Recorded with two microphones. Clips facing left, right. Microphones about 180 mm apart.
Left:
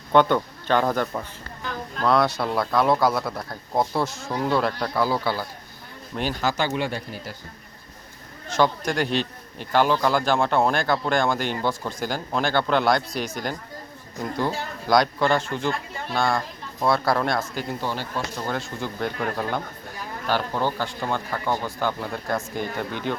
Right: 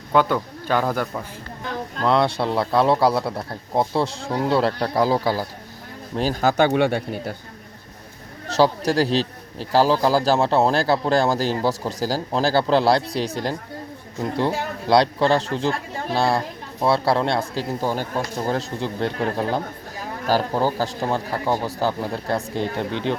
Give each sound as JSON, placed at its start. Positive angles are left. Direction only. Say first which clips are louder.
{"t": 0.1, "sound": "a man's voice", "louder": "left 1 dB", "side_deg": -5}
{"t": 2.0, "sound": "speech", "louder": "right 1 dB", "side_deg": -25}
{"t": 8.5, "sound": "speech", "louder": "right 4 dB", "side_deg": -35}